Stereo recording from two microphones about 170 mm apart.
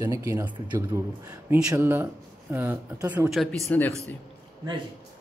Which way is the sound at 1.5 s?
5° right (ahead or behind).